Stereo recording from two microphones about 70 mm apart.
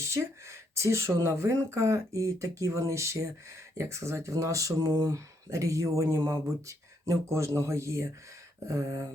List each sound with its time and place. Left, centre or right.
0.0 s speech: right